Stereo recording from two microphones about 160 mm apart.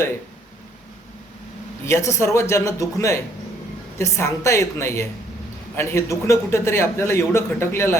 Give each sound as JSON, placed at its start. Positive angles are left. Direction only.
{"t": 1.9, "sound": "a man's voice", "side_deg": 15}